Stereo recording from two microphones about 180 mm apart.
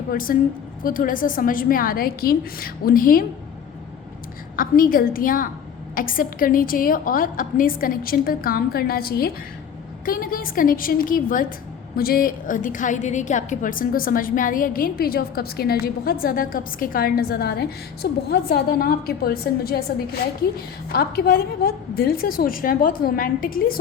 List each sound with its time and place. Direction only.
0.1 s a woman's voice: 50° left (ahead or behind)
4.5 s a woman's voice: 50° left (ahead or behind)
20.9 s a woman's voice: 60° left (ahead or behind)